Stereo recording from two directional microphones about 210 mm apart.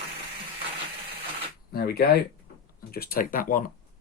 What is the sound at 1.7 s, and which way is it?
Speech, 45° left (ahead or behind).